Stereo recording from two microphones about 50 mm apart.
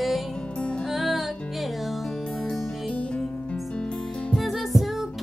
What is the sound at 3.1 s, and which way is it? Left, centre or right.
Music, centre.